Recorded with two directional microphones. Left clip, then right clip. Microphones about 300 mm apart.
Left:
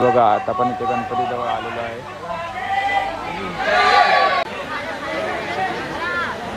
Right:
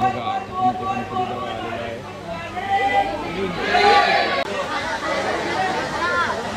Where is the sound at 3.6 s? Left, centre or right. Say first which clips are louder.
Left 1 dB; centre.